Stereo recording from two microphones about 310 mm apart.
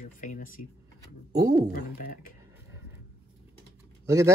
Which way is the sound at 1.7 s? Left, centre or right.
Left.